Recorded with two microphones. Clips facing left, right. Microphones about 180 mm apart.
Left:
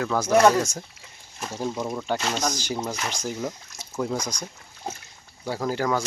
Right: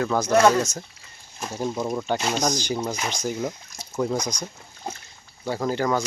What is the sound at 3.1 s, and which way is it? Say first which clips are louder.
Speech: right 3 dB; 10° left (ahead or behind).